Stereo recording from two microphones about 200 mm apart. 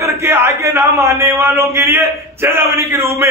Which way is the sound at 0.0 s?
10° right (ahead or behind).